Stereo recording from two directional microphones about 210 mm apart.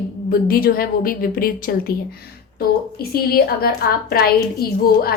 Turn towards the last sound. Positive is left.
turn(degrees=45)  # may be behind; listen again after turning